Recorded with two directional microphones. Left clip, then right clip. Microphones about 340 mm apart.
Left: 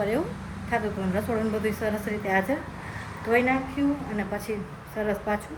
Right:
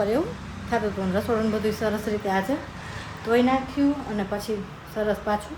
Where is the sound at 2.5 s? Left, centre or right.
Centre.